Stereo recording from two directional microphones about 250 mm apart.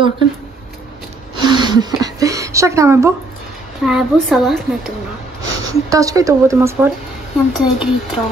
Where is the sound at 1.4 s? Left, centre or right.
Centre.